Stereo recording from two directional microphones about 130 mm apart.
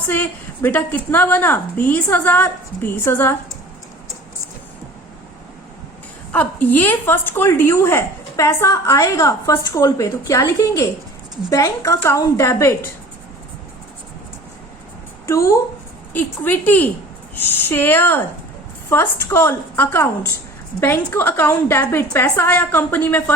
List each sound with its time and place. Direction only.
0.1 s a woman's voice: 15° left (ahead or behind)
6.3 s a woman's voice: 15° left (ahead or behind)
15.3 s a woman's voice: 20° left (ahead or behind)